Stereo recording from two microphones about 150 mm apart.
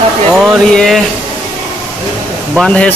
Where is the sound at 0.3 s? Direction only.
Centre (ahead or behind).